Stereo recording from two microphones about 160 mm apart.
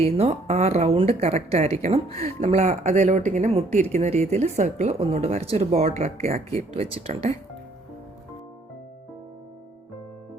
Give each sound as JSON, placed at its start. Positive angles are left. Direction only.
{"t": 0.0, "sound": "speech", "side_deg": -40}